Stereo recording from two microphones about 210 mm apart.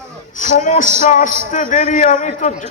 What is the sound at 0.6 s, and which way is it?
A man's voice, 35° left (ahead or behind).